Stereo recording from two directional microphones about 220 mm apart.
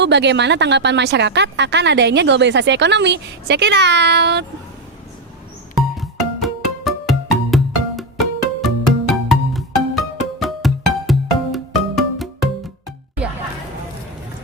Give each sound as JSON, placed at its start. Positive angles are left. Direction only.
{"t": 0.0, "sound": "a woman's voice", "side_deg": -50}
{"t": 5.7, "sound": "music", "side_deg": 0}